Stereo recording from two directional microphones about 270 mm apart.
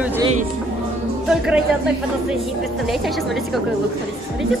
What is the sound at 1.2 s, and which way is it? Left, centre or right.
Speech, centre.